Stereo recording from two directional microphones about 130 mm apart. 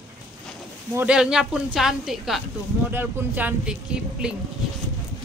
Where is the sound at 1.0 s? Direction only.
5° right (ahead or behind).